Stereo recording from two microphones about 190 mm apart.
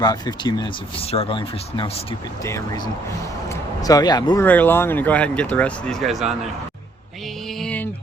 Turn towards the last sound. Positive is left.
turn(degrees=10)  # may be behind; listen again after turning